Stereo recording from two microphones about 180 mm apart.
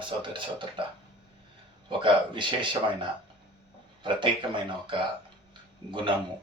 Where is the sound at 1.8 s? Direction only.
25° right (ahead or behind).